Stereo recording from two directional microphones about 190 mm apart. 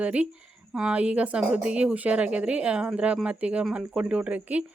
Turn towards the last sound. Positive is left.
turn(degrees=-5)  # may be behind; listen again after turning